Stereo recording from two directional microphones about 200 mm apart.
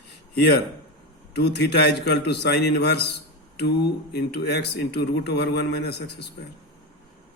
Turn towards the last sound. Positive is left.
turn(degrees=55)  # may be behind; listen again after turning